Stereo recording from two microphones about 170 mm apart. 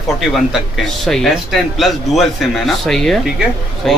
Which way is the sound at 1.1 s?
Centre (ahead or behind).